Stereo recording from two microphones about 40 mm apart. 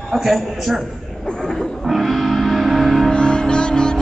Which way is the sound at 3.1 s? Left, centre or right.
Left.